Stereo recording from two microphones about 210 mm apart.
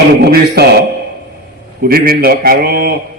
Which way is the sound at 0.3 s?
50° right (ahead or behind).